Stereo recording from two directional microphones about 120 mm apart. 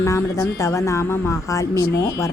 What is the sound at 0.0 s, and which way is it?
Speech, 25° left (ahead or behind).